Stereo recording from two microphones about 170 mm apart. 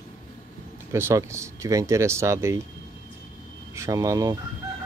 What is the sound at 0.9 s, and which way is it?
Speech, 15° right (ahead or behind).